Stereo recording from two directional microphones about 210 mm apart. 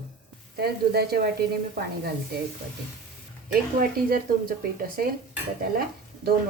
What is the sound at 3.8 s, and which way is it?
Speech, 45° right (ahead or behind).